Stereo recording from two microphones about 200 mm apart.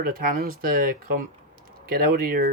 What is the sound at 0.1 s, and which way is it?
Speech, 45° right (ahead or behind).